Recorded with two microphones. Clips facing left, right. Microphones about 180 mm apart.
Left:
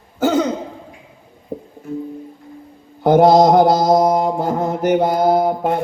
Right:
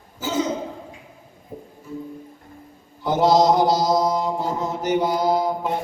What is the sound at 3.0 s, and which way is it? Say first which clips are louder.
Mantra: left 7 dB; 55° left (ahead or behind).